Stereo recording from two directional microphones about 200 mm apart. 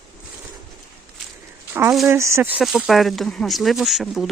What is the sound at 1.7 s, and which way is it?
Speech, 5° right (ahead or behind).